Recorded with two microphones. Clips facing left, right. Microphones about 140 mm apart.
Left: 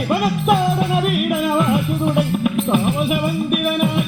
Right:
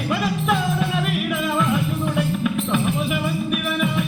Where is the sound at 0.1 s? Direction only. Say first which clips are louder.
Left 5 dB; 55° left (ahead or behind).